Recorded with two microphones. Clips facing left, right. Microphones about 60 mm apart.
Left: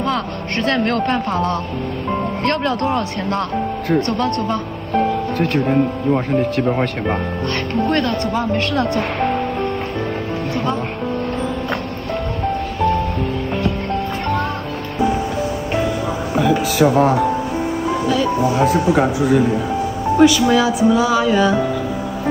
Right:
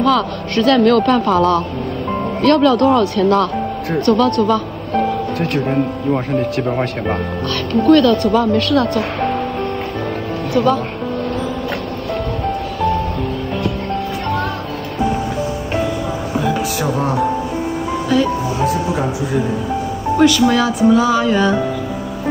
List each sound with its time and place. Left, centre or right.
0.0 s a man's voice: left
2.4 s a man's voice: left
4.9 s speech: centre
7.8 s a man's voice: left
20.2 s speech: centre